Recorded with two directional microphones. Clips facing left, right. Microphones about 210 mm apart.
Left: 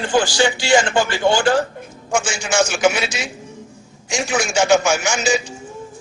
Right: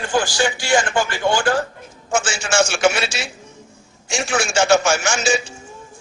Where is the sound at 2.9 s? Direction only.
15° left (ahead or behind).